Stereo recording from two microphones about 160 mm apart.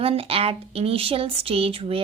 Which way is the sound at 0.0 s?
35° right (ahead or behind).